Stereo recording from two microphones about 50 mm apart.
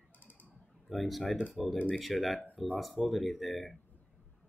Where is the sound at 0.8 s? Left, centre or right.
Centre.